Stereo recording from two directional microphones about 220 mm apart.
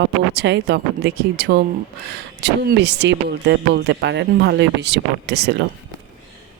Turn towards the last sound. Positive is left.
turn(degrees=-50)  # may be behind; listen again after turning